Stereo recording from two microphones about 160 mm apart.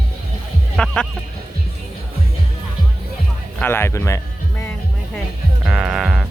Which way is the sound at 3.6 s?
15° left (ahead or behind).